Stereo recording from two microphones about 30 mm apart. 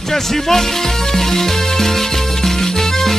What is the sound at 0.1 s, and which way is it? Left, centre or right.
Speech, centre.